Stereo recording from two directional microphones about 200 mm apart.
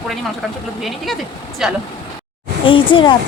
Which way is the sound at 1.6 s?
Centre (ahead or behind).